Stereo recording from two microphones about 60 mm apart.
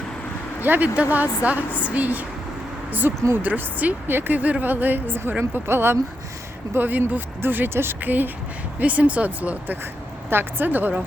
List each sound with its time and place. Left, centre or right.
0.6 s a woman's voice: right
3.3 s a woman's voice: right
10.2 s a woman's voice: right